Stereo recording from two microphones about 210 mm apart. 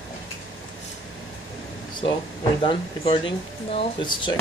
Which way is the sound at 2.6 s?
25° left (ahead or behind).